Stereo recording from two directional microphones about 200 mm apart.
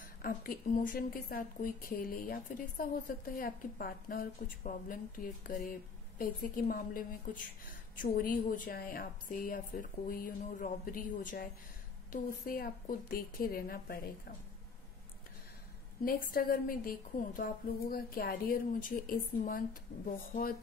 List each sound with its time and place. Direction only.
0.2 s a woman's voice: 45° left (ahead or behind)
16.0 s a woman's voice: 45° left (ahead or behind)